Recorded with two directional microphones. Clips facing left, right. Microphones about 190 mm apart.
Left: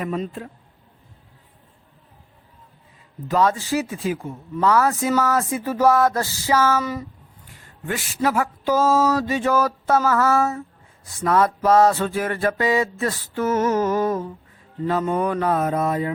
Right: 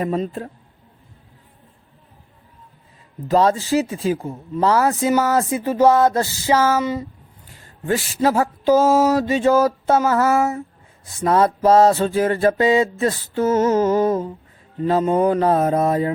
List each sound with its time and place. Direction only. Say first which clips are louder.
0.0 s mantra: right 4 dB; 35° right (ahead or behind)
3.2 s mantra: right 4 dB; 30° right (ahead or behind)